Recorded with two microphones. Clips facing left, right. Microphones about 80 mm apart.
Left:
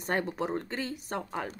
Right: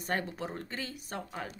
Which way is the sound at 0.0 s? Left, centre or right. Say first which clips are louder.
Left 4 dB; left.